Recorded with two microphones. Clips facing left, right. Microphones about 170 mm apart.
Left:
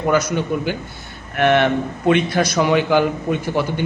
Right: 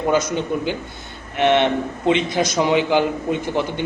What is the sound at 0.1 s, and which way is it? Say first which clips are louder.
A man's voice: left 2 dB; 25° right (ahead or behind).